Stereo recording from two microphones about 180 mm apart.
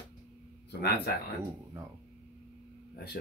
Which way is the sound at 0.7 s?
60° left (ahead or behind).